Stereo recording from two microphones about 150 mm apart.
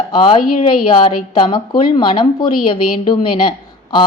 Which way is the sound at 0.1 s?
35° left (ahead or behind).